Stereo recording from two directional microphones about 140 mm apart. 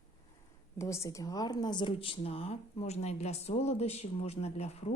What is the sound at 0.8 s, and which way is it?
A woman's voice, 20° left (ahead or behind).